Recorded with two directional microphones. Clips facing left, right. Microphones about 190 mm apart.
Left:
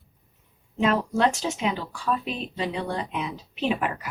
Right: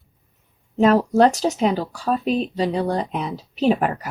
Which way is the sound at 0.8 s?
40° right (ahead or behind).